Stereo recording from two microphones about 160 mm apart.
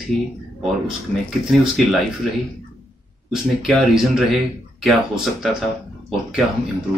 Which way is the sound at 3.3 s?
Centre (ahead or behind).